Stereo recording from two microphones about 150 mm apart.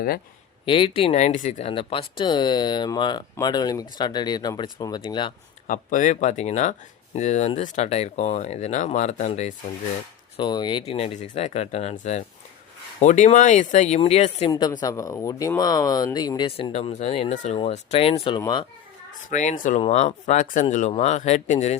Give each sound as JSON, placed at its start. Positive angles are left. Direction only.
{"t": 0.6, "sound": "speech", "side_deg": 35}
{"t": 5.6, "sound": "speech", "side_deg": 55}
{"t": 10.3, "sound": "speech", "side_deg": 30}
{"t": 10.9, "sound": "speech", "side_deg": 45}
{"t": 14.5, "sound": "speech", "side_deg": 25}
{"t": 16.5, "sound": "speech", "side_deg": 40}
{"t": 18.3, "sound": "speech", "side_deg": 30}
{"t": 19.3, "sound": "speech", "side_deg": 55}
{"t": 19.8, "sound": "speech", "side_deg": 50}